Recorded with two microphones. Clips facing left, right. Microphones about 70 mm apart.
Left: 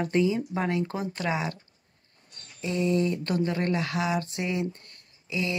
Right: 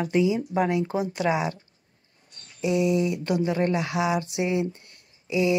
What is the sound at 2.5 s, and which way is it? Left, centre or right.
Speech, centre.